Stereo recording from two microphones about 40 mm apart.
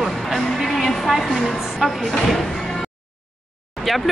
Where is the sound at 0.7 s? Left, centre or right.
Centre.